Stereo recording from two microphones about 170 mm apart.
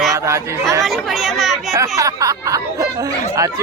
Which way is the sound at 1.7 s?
20° right (ahead or behind).